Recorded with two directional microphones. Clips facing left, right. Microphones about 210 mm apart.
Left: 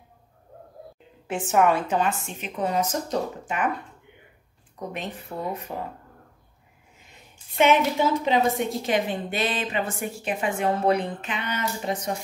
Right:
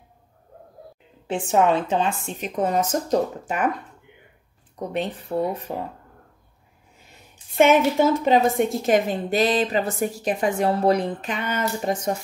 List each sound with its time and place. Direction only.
1.2 s a woman's voice: 30° right (ahead or behind)
4.7 s a woman's voice: 35° right (ahead or behind)
7.5 s a woman's voice: 45° right (ahead or behind)